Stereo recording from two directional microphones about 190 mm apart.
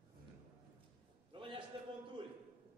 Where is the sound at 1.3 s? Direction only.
25° right (ahead or behind).